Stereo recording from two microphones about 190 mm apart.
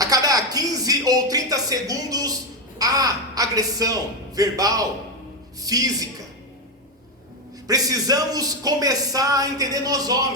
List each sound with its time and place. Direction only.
0.0 s a sound: 20° right (ahead or behind)
2.7 s a man's voice: 20° right (ahead or behind)
7.7 s a man's voice: 20° right (ahead or behind)